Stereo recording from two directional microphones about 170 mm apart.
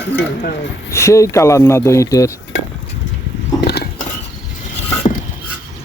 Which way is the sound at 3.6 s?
70° left (ahead or behind).